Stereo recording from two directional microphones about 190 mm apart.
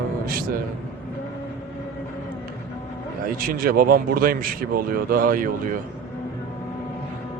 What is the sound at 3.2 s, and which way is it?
Speech, 50° right (ahead or behind).